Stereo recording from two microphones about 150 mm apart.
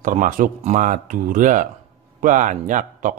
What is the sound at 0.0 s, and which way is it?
Speech, 60° right (ahead or behind).